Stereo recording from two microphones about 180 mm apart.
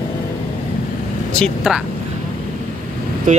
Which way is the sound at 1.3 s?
Centre (ahead or behind).